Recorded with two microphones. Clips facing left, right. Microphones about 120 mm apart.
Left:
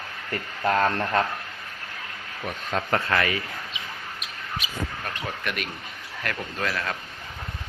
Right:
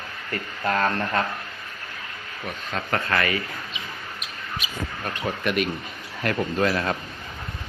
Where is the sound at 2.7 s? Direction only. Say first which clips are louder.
Left 1 dB; 15° left (ahead or behind).